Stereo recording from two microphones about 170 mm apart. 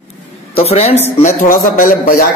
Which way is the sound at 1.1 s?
50° left (ahead or behind).